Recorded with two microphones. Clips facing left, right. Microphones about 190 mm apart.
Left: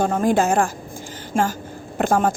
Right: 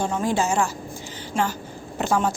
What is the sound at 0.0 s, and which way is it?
Speech, 50° left (ahead or behind).